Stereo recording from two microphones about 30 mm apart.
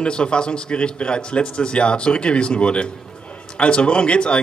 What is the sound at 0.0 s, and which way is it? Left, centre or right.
Speech, left.